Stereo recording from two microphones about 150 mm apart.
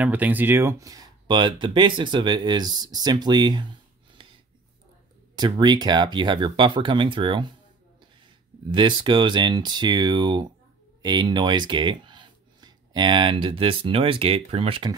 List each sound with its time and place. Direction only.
0.0 s speech: 10° right (ahead or behind); by 3.6 s 30° right (ahead or behind)
4.2 s a sound: 35° right (ahead or behind)
5.4 s speech: 30° right (ahead or behind)
8.7 s speech: 30° right (ahead or behind)